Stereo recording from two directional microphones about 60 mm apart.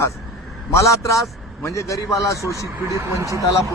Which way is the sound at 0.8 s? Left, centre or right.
Left.